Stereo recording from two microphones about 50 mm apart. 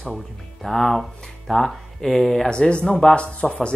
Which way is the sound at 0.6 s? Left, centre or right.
Centre.